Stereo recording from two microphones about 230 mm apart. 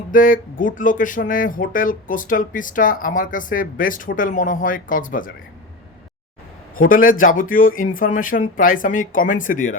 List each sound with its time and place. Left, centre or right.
0.1 s speech: left
6.7 s speech: left